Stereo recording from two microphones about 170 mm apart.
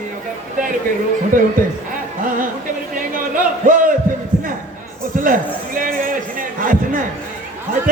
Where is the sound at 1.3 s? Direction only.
50° right (ahead or behind).